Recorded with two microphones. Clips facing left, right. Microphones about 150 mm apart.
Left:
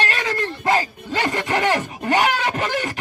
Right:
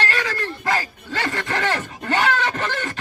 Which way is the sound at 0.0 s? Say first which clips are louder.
Left 1 dB; 20° left (ahead or behind).